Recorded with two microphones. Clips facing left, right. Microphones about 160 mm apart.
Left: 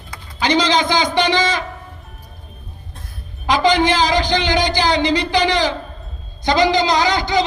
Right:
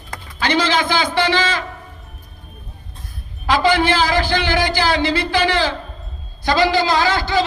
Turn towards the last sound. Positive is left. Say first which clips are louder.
# left 1 dB
turn(degrees=20)  # may be behind; listen again after turning